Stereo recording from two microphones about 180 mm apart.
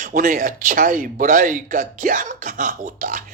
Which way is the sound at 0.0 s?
45° right (ahead or behind).